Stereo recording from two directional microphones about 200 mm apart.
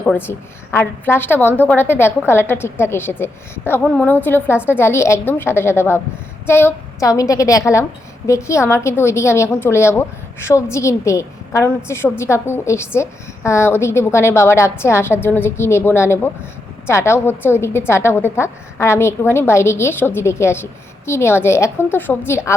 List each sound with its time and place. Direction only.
0.0 s a woman's voice: 10° left (ahead or behind)